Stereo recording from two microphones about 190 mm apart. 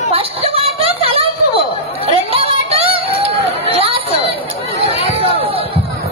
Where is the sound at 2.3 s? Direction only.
30° right (ahead or behind).